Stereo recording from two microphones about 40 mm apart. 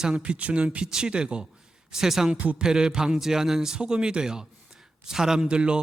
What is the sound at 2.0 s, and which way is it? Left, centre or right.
A man's voice, centre.